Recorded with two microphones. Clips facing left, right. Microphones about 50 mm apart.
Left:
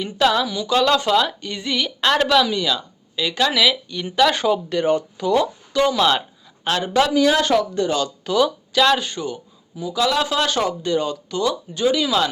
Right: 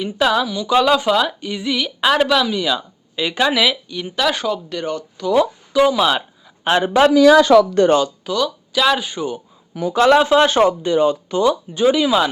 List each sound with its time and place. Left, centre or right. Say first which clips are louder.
0.0 s speech: right 1 dB; centre
3.8 s speech: left 2 dB; centre
5.3 s speech: right 3 dB; centre
6.7 s speech: right 5 dB; right
8.0 s speech: left 1 dB; centre
9.9 s speech: right 8 dB; right
10.2 s speech: right 7 dB; right